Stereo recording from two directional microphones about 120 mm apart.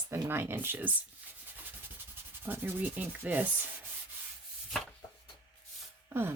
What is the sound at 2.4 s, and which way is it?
Sanding, 15° right (ahead or behind).